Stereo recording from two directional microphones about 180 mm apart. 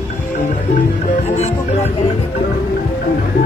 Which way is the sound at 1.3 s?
40° left (ahead or behind).